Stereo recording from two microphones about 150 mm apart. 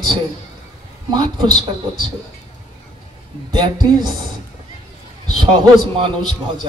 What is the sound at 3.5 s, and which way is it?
Speech, 30° right (ahead or behind).